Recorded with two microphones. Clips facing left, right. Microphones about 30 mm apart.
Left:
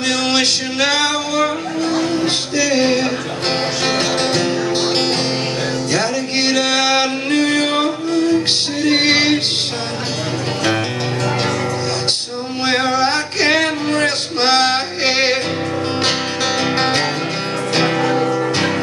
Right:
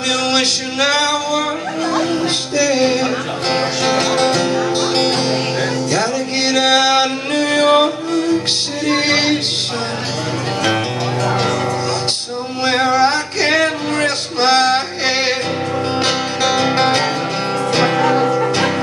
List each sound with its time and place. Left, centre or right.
0.7 s music: centre
2.5 s music: centre
5.9 s music: centre
6.5 s music: centre
9.0 s a sound: centre
12.6 s music: centre
18.2 s music: centre